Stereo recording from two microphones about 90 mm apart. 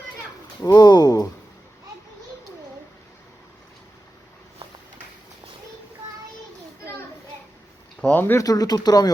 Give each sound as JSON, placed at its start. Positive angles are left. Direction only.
{"t": 0.6, "sound": "speech", "side_deg": 50}
{"t": 8.1, "sound": "speech", "side_deg": 25}
{"t": 8.4, "sound": "speech", "side_deg": 45}